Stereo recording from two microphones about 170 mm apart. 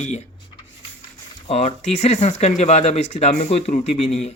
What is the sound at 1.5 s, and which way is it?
Speech, 40° left (ahead or behind).